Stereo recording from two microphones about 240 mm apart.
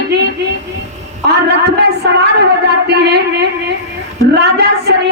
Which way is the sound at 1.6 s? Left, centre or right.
Right.